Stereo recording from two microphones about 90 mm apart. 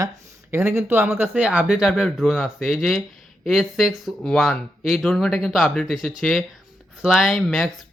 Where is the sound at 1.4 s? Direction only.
10° right (ahead or behind).